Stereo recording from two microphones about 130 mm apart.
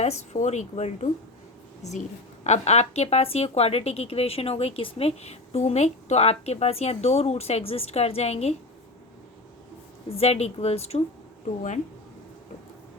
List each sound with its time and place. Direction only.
0.0 s speech: 60° left (ahead or behind)
10.1 s speech: 50° left (ahead or behind)